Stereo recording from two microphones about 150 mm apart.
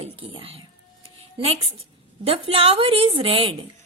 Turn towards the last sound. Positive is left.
turn(degrees=-40)  # may be behind; listen again after turning